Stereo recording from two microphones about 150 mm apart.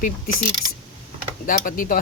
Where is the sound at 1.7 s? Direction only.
70° left (ahead or behind).